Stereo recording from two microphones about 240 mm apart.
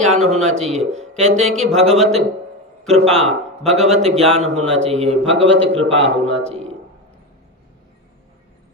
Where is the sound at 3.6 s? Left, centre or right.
Centre.